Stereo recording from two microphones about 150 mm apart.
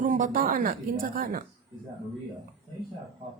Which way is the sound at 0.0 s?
60° right (ahead or behind).